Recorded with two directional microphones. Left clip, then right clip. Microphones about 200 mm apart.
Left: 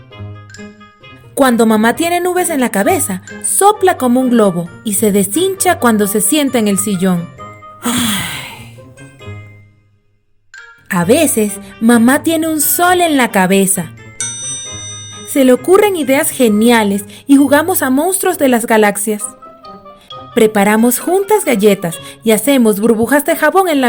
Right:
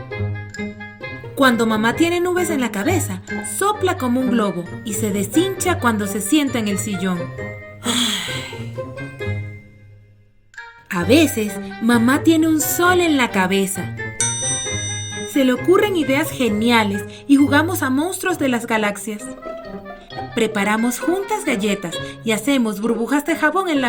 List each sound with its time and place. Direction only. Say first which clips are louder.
1.4 s speech: left 6 dB; 55° left (ahead or behind)
7.9 s music: left 3 dB; 40° left (ahead or behind)
10.8 s speech: left 4 dB; 55° left (ahead or behind)
14.2 s music: even; centre (ahead or behind)
15.3 s speech: left 7 dB; 55° left (ahead or behind)
20.3 s speech: left 9 dB; 55° left (ahead or behind)